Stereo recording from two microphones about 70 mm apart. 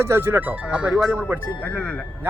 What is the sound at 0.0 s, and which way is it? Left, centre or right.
Speech, right.